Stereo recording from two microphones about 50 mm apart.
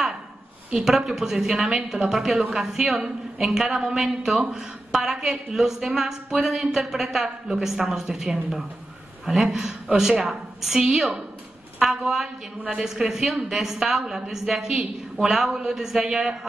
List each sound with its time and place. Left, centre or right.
0.7 s speech: centre